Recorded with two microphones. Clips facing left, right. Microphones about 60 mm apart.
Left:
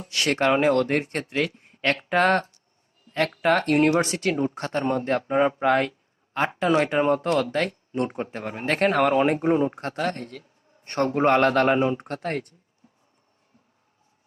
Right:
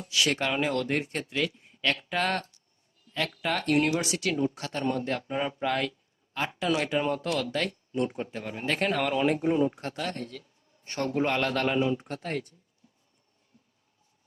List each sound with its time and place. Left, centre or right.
0.1 s speech: left
11.9 s speech: left